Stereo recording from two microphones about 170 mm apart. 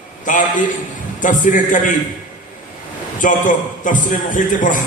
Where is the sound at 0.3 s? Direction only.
50° left (ahead or behind).